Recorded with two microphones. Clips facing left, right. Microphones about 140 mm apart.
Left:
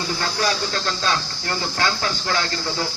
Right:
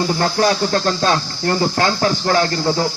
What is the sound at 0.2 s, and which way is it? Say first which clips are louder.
Speech: right 7 dB; 45° right (ahead or behind).